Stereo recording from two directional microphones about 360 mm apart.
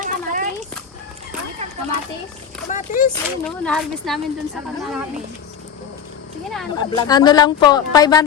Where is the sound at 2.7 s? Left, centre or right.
Left.